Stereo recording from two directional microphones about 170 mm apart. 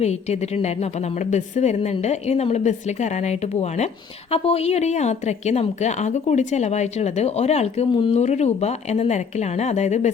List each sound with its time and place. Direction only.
0.0 s a woman's voice: 40° left (ahead or behind)